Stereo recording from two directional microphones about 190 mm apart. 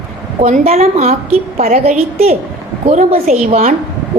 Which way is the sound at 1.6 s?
45° right (ahead or behind).